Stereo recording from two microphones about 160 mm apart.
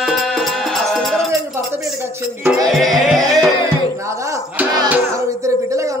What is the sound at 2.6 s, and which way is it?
Music, centre (ahead or behind).